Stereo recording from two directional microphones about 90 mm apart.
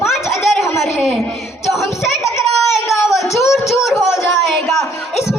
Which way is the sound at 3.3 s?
35° left (ahead or behind).